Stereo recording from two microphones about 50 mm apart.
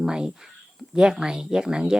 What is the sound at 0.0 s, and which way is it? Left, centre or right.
Speech, centre.